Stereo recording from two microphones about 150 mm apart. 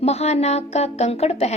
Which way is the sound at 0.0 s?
45° left (ahead or behind).